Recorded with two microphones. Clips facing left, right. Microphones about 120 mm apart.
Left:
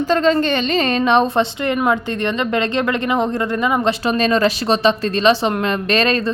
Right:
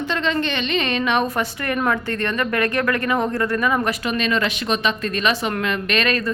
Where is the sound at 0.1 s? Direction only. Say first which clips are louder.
Left 8 dB; 40° left (ahead or behind); by 3.9 s 20° left (ahead or behind).